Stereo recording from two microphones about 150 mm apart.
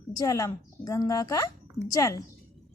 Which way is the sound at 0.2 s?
20° left (ahead or behind).